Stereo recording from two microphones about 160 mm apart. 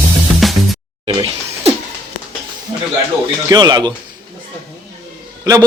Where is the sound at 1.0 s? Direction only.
40° right (ahead or behind).